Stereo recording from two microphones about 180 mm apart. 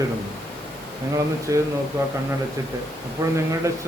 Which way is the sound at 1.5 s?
15° right (ahead or behind).